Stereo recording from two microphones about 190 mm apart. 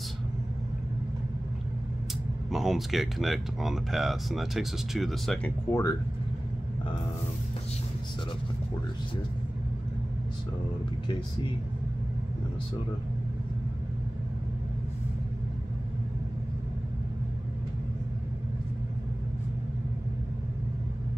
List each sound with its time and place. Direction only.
2.5 s speech: centre (ahead or behind)
5.7 s speech: 15° left (ahead or behind)